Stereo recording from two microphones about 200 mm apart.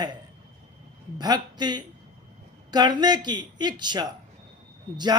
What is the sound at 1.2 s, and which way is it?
A woman's voice, 20° right (ahead or behind).